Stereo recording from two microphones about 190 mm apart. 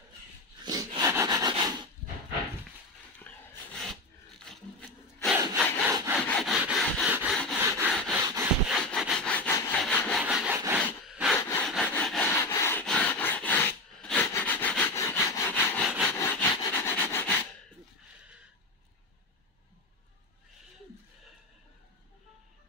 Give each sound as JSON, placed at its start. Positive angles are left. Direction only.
{"t": 0.7, "sound": "rub", "side_deg": -20}
{"t": 3.3, "sound": "a sound", "side_deg": 0}
{"t": 6.2, "sound": "wood", "side_deg": 0}
{"t": 7.6, "sound": "rub", "side_deg": -15}
{"t": 7.9, "sound": "rub", "side_deg": 5}
{"t": 8.6, "sound": "sawing", "side_deg": 0}
{"t": 10.2, "sound": "sawing", "side_deg": -5}
{"t": 10.8, "sound": "a sound", "side_deg": 5}
{"t": 11.6, "sound": "rub", "side_deg": 5}
{"t": 14.2, "sound": "sawing", "side_deg": 10}
{"t": 16.5, "sound": "a sound", "side_deg": 15}